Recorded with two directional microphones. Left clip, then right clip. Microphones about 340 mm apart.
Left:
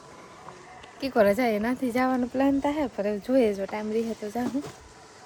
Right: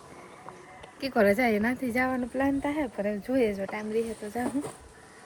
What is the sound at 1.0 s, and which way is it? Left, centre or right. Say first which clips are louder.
Speech: left 2 dB; centre.